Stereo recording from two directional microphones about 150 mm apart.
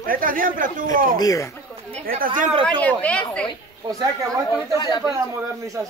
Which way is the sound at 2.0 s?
70° right (ahead or behind).